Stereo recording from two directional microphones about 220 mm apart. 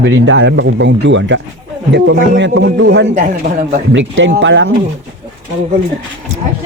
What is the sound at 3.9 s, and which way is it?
Speech, 55° right (ahead or behind).